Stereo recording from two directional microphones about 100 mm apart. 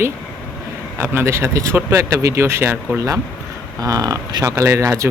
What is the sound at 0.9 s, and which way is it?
Speech, 25° right (ahead or behind).